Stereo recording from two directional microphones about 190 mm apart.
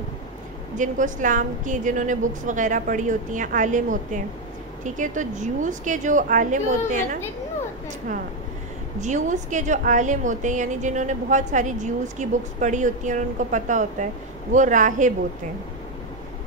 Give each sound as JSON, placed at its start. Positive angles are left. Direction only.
{"t": 0.7, "sound": "a woman's voice", "side_deg": -40}
{"t": 9.0, "sound": "a woman's voice", "side_deg": -40}